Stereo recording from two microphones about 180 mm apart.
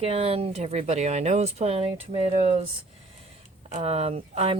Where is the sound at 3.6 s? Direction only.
35° right (ahead or behind).